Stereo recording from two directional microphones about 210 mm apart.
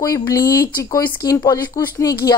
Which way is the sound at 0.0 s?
15° left (ahead or behind).